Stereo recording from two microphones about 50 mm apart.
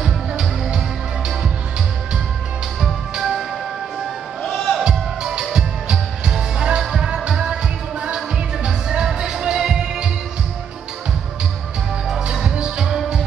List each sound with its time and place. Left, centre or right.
0.0 s music: centre
2.8 s music: centre
4.5 s music: centre
4.8 s music: centre
8.6 s music: centre
12.2 s music: centre